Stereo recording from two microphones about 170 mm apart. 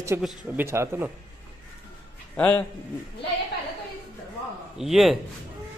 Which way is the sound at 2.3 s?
10° left (ahead or behind).